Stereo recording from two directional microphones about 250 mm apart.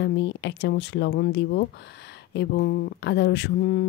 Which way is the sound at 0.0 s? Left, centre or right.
Left.